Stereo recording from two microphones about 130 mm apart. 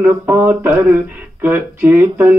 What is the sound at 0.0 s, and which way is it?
Speech, 15° right (ahead or behind).